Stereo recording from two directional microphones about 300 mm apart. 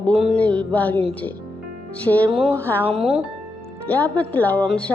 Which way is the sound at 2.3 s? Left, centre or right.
Centre.